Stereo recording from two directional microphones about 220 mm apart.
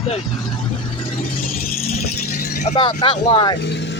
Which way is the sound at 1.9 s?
40° left (ahead or behind).